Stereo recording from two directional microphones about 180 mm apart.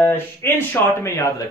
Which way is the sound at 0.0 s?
10° left (ahead or behind).